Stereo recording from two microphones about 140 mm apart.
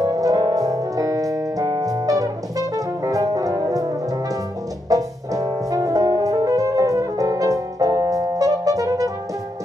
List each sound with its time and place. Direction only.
0.0 s piano: 25° right (ahead or behind)
4.8 s music: 25° right (ahead or behind)